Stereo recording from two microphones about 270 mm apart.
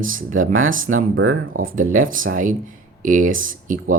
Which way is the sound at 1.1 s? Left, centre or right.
Right.